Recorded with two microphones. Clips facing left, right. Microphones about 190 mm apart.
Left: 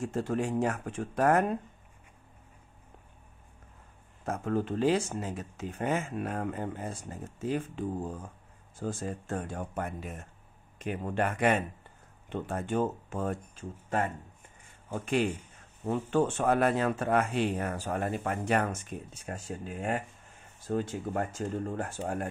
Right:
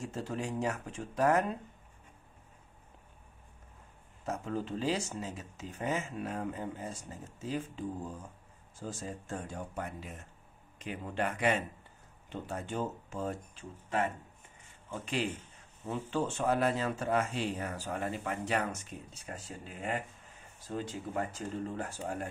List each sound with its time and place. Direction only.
0.0 s speech: 55° left (ahead or behind)
4.3 s speech: 55° left (ahead or behind)